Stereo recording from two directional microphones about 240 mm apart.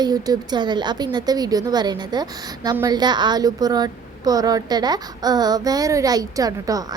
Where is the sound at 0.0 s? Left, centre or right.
Centre.